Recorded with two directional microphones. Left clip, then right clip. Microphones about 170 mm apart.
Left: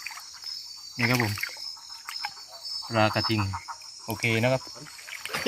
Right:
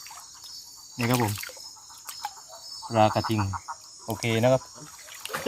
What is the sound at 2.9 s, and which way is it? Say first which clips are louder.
Speech: right 2 dB; 10° right (ahead or behind).